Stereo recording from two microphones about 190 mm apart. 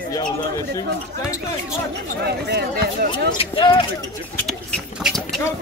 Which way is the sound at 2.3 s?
60° right (ahead or behind).